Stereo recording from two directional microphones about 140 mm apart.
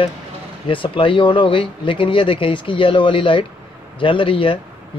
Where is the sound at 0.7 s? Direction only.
35° left (ahead or behind).